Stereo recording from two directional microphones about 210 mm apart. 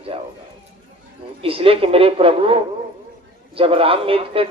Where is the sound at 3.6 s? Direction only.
25° right (ahead or behind).